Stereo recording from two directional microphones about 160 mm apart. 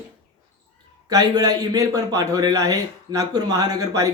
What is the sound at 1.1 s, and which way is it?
A man's voice, 25° right (ahead or behind).